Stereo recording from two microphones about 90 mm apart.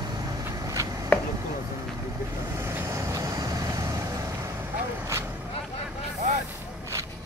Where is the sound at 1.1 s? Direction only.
20° left (ahead or behind).